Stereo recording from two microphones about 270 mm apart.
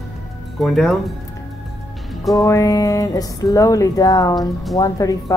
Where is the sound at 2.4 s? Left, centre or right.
Centre.